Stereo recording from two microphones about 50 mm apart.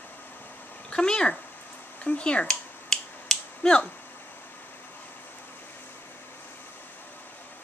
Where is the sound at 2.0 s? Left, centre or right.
Left.